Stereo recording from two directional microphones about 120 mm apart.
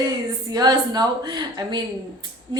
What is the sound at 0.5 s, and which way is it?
Speech, 35° right (ahead or behind).